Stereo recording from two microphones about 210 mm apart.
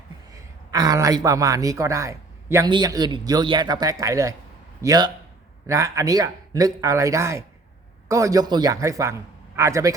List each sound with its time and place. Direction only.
0.3 s speech: 15° right (ahead or behind)